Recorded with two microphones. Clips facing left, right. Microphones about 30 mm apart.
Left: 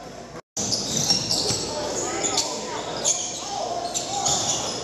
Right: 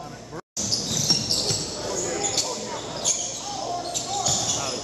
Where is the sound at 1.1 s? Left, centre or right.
Centre.